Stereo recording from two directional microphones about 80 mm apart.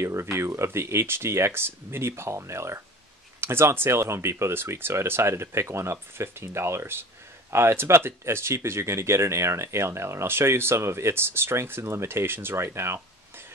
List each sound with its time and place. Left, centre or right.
0.0 s speech: right